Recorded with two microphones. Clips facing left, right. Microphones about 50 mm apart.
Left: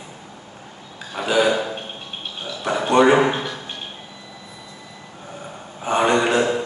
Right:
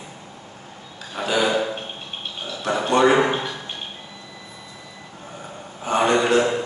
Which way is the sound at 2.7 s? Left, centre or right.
Centre.